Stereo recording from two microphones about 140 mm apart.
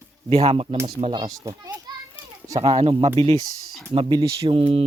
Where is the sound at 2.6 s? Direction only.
45° right (ahead or behind).